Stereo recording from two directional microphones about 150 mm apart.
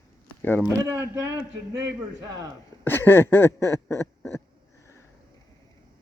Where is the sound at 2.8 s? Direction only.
15° left (ahead or behind).